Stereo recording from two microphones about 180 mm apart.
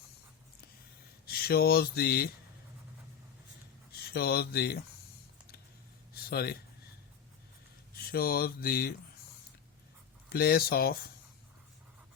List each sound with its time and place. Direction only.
1.2 s speech: 60° left (ahead or behind)
3.9 s speech: 60° left (ahead or behind)
6.3 s mantra: 60° left (ahead or behind)
7.9 s mantra: 55° left (ahead or behind)
10.2 s mantra: 55° left (ahead or behind)